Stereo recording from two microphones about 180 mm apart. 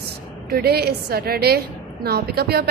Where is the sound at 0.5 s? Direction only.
60° right (ahead or behind).